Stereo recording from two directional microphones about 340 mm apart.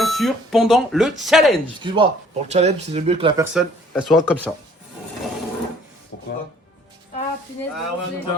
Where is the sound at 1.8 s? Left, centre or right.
Centre.